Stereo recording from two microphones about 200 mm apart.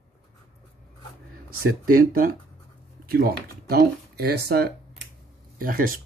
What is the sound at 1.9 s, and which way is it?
Speech, 45° right (ahead or behind).